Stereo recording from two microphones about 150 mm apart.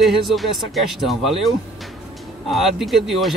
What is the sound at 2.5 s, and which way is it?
Speech, centre (ahead or behind).